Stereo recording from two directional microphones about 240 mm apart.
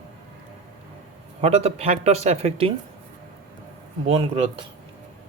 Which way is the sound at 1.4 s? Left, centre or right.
Right.